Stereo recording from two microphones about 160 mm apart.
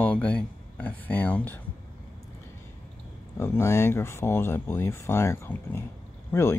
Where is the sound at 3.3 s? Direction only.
15° left (ahead or behind).